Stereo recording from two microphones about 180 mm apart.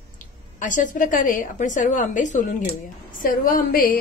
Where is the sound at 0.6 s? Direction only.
45° left (ahead or behind).